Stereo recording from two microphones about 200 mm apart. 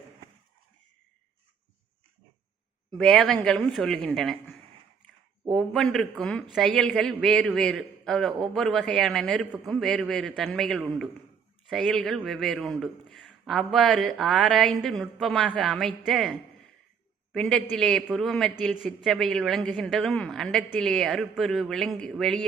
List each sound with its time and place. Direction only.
3.0 s a man's voice: 5° left (ahead or behind)